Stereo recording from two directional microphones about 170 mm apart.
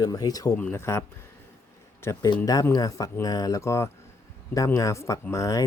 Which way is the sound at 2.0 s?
20° left (ahead or behind).